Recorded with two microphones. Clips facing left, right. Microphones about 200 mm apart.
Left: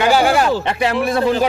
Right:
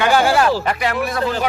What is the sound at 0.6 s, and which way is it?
Speech, 25° left (ahead or behind).